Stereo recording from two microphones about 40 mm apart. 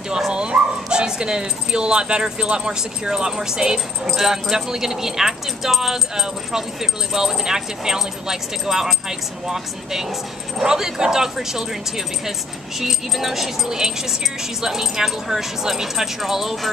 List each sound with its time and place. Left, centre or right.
0.3 s speech: right